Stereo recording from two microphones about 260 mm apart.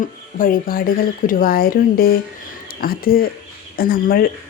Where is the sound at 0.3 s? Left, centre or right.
Left.